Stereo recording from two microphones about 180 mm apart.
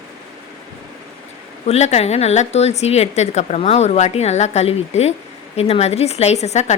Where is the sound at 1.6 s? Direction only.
35° left (ahead or behind).